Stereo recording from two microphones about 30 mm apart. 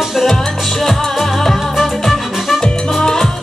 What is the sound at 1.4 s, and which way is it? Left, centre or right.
Music, centre.